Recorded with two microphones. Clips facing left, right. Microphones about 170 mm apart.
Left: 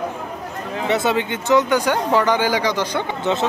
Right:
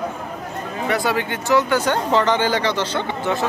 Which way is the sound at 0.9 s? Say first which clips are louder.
Left 2 dB; 20° left (ahead or behind).